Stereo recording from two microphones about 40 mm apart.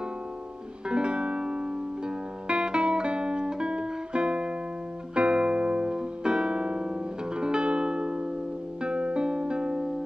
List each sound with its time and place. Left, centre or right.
0.8 s music: right